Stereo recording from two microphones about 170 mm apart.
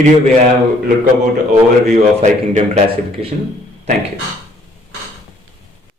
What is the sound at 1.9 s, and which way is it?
Speech, 45° right (ahead or behind).